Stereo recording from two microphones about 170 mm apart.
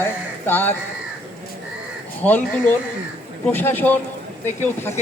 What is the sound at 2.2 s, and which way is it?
Speech, 10° left (ahead or behind).